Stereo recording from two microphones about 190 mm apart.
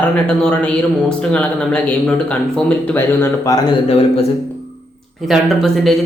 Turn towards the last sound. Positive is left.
turn(degrees=0)  # may be behind; listen again after turning